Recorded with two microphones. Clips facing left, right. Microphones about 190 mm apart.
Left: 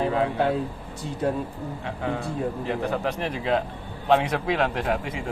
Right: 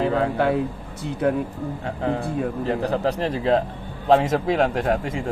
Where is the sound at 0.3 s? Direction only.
70° right (ahead or behind).